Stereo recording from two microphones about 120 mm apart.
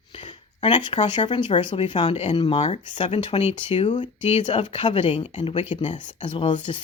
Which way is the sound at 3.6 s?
70° left (ahead or behind).